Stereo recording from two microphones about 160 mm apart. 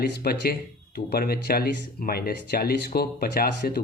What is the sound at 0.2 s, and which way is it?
A man's voice, 75° left (ahead or behind).